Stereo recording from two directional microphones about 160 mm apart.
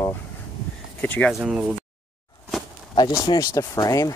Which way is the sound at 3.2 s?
25° left (ahead or behind).